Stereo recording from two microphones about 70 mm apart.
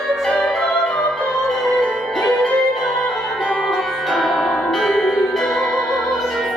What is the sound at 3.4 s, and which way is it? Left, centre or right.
Music, centre.